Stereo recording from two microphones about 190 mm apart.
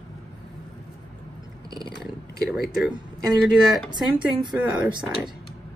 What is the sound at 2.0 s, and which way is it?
Speech, centre (ahead or behind).